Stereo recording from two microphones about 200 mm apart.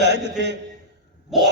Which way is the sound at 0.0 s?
60° right (ahead or behind).